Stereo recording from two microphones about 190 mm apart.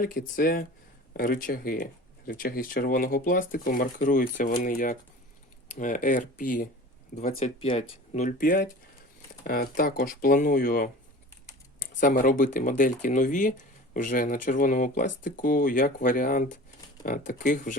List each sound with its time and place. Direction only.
0.0 s speech: 50° left (ahead or behind)
7.3 s speech: 30° left (ahead or behind)